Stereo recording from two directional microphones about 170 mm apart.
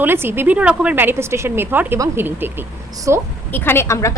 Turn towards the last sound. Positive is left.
turn(degrees=15)  # may be behind; listen again after turning